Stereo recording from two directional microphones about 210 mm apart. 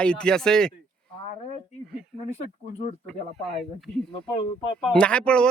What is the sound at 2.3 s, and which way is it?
Speech, 30° left (ahead or behind).